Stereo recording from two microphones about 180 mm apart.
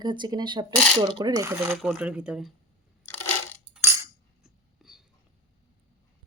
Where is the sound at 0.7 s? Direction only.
5° left (ahead or behind).